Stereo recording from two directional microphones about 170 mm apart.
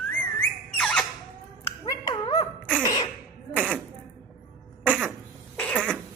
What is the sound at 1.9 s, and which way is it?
Finger snapping, 20° left (ahead or behind).